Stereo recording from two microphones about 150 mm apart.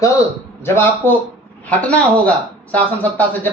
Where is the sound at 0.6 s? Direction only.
15° left (ahead or behind).